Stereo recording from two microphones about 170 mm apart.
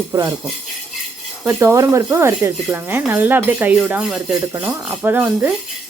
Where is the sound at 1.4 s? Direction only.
15° right (ahead or behind).